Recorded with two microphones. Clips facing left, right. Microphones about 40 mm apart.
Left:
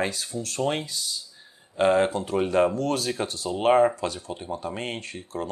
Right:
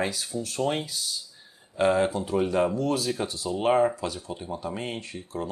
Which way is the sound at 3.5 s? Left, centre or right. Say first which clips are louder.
Left 3 dB; left.